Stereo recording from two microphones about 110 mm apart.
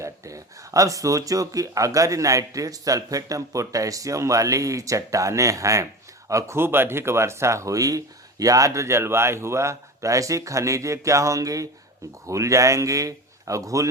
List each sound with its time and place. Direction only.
0.0 s speech: 30° right (ahead or behind)